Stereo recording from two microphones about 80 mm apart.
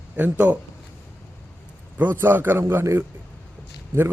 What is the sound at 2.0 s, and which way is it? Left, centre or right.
A man's voice, right.